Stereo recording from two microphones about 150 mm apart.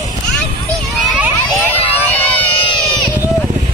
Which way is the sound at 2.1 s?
10° left (ahead or behind).